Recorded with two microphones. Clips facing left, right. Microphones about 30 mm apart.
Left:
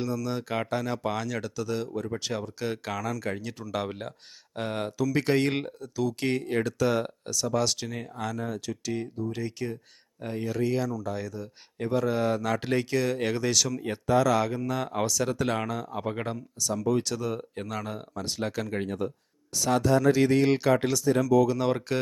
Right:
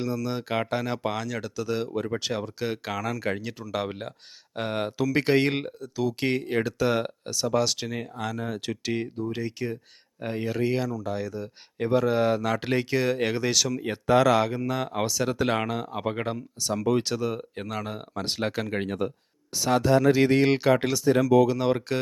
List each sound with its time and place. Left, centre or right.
0.0 s speech: centre
1.1 s speech: centre
1.6 s speech: right
5.5 s speech: centre; by 7.5 s right
7.5 s speech: centre
8.6 s speech: right
9.3 s speech: centre
10.2 s speech: right
14.1 s speech: right; by 16.4 s centre
16.6 s speech: right
17.2 s speech: centre
18.1 s speech: right
21.6 s speech: centre